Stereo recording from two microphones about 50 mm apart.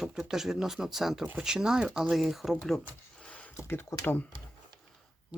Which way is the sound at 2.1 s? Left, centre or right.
Centre.